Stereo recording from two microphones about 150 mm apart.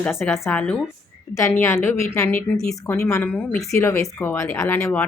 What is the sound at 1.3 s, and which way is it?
Speech, 20° left (ahead or behind).